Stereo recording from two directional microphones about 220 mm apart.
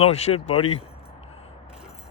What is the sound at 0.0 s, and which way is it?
Speech, 30° left (ahead or behind).